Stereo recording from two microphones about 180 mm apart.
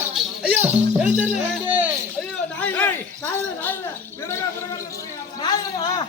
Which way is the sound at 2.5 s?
10° left (ahead or behind).